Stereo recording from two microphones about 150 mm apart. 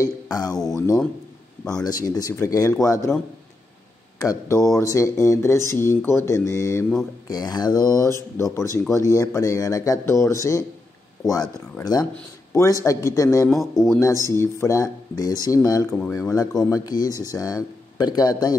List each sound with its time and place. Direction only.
0.0 s speech: 25° left (ahead or behind)
1.8 s speech: 25° left (ahead or behind)
4.2 s speech: 25° left (ahead or behind)
11.8 s speech: 25° left (ahead or behind)
13.5 s speech: centre (ahead or behind)
13.8 s speech: 20° left (ahead or behind)